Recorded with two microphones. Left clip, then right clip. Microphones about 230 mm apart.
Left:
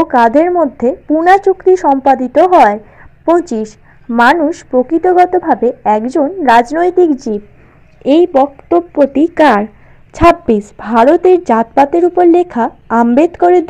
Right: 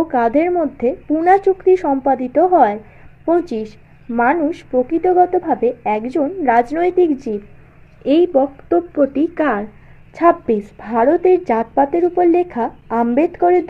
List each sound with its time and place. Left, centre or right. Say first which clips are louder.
0.1 s a woman's voice: left 6 dB; left